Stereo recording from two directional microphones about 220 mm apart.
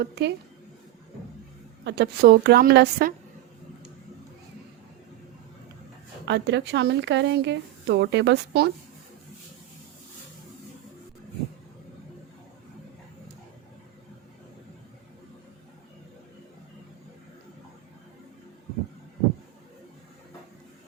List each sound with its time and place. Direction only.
0.0 s speech: 50° right (ahead or behind)
1.8 s speech: 50° right (ahead or behind)
6.2 s speech: 50° right (ahead or behind)